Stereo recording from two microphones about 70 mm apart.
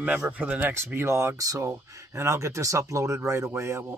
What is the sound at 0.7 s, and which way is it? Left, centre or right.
Speech, right.